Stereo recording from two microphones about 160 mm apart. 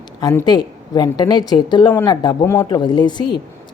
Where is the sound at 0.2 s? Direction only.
25° left (ahead or behind).